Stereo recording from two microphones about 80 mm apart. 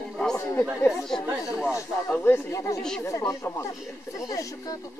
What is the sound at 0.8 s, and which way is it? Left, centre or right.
Speech, centre.